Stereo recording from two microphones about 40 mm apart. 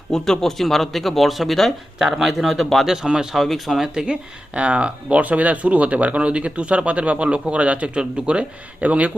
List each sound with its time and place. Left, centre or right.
0.1 s speech: centre
2.8 s a man's voice: centre
3.3 s speech: centre
3.9 s speech: right